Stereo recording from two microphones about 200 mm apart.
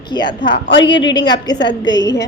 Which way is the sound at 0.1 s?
20° left (ahead or behind).